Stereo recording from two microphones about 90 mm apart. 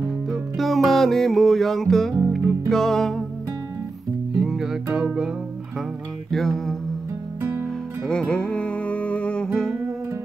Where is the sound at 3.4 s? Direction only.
35° right (ahead or behind).